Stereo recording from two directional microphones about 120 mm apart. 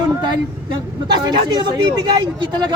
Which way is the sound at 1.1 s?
35° right (ahead or behind).